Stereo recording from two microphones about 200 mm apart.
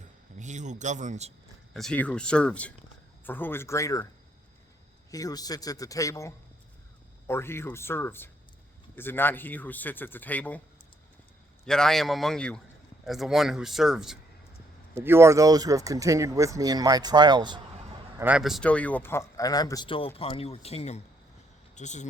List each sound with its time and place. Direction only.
0.3 s speech: 35° right (ahead or behind)
1.7 s speech: 5° left (ahead or behind)
5.1 s speech: 20° left (ahead or behind)
11.6 s speech: 5° left (ahead or behind)
14.9 s speech: 15° right (ahead or behind)
18.2 s a man's voice: 5° right (ahead or behind); by 22.0 s 35° left (ahead or behind)